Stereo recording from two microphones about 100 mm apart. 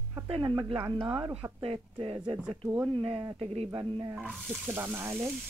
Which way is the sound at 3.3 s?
85° right.